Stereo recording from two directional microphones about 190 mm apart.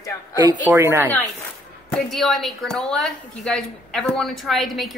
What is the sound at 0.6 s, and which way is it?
Speech, 15° right (ahead or behind).